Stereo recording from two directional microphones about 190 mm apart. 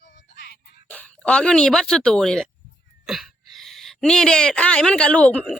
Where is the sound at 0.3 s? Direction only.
55° left (ahead or behind).